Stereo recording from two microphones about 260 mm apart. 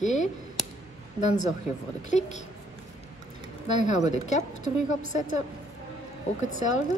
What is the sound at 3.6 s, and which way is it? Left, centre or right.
Speech, left.